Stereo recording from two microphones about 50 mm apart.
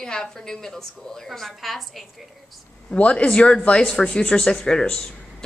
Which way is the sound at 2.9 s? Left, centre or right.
Left.